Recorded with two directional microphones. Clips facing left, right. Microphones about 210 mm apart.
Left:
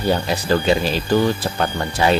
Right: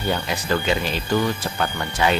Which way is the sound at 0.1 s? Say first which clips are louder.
Left 5 dB; 35° left (ahead or behind).